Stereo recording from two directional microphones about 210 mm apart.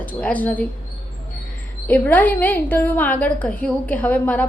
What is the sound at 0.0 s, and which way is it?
Speech, 5° left (ahead or behind).